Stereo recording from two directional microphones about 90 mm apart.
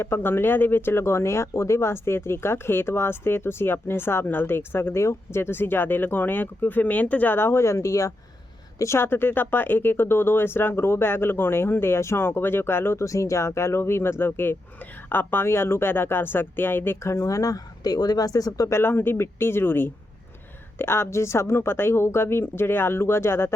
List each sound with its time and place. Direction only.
0.0 s speech: 25° left (ahead or behind); by 18.8 s 40° left (ahead or behind)
18.8 s speech: 25° left (ahead or behind)